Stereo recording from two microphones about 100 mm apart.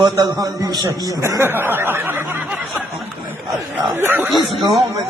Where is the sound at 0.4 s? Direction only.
35° right (ahead or behind).